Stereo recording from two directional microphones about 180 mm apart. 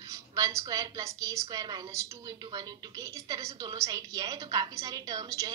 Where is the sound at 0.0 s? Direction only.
15° right (ahead or behind).